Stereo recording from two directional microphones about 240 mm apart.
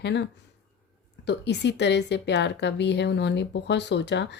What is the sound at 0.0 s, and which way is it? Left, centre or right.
A woman's voice, left.